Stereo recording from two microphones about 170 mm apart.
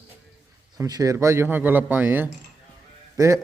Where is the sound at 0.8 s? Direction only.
20° right (ahead or behind).